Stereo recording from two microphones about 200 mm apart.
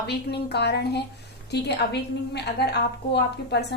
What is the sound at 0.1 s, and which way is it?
A woman's voice, 55° left (ahead or behind).